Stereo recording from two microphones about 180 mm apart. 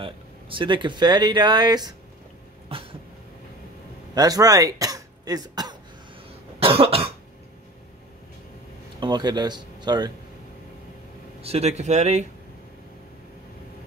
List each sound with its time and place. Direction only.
0.0 s speech: 30° right (ahead or behind)
2.7 s cough: 30° right (ahead or behind)
4.1 s speech: 20° right (ahead or behind)
6.6 s cough: 30° right (ahead or behind)
9.0 s speech: 25° right (ahead or behind)
11.4 s speech: 35° right (ahead or behind)